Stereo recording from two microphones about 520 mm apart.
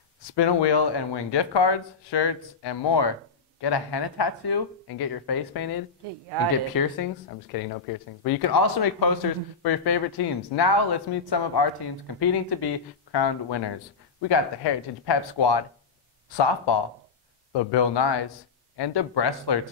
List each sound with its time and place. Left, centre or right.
0.4 s speech: left
6.3 s speech: right
6.7 s speech: left
17.5 s speech: left